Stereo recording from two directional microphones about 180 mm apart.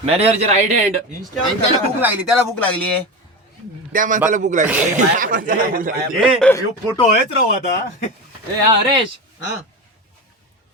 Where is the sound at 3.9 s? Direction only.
45° right (ahead or behind).